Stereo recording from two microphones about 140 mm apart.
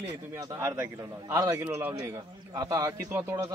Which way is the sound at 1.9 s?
25° right (ahead or behind).